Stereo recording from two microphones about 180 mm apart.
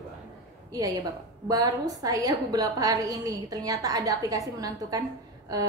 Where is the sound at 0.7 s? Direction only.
20° right (ahead or behind).